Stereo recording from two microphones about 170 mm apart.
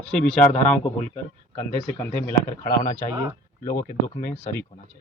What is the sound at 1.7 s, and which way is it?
Speech, 15° left (ahead or behind).